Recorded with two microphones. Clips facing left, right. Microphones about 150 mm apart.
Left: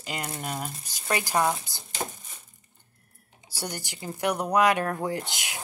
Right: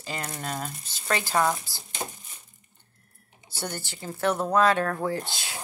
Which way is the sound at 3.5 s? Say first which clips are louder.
Right 1 dB; 10° left (ahead or behind).